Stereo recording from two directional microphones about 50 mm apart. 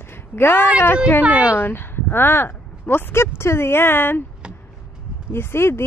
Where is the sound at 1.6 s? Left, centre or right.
Left.